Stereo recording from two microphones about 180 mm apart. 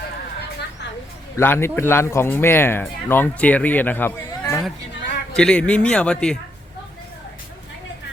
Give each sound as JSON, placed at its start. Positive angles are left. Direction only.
{"t": 1.4, "sound": "speech", "side_deg": 15}